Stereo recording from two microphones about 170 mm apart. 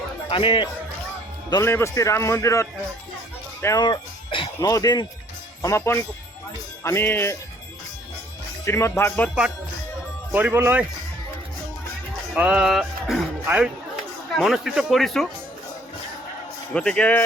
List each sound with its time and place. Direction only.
0.3 s speech: 30° left (ahead or behind)
1.5 s a man's voice: 20° left (ahead or behind)
8.6 s a man's voice: 15° left (ahead or behind)
10.3 s speech: 10° right (ahead or behind)
12.3 s speech: 5° right (ahead or behind)
16.7 s speech: 5° left (ahead or behind)